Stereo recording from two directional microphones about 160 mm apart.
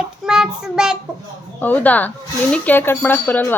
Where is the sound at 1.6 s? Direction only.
10° left (ahead or behind).